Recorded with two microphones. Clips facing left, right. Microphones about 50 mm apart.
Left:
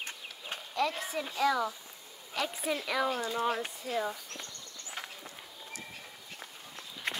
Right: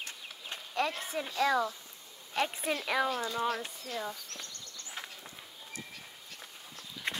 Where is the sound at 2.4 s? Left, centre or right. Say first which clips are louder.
Right 1 dB; right.